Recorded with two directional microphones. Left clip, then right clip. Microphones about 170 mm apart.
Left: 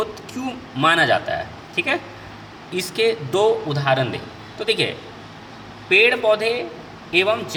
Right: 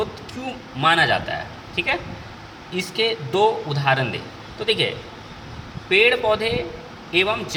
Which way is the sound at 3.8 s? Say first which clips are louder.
Even; 15° left (ahead or behind).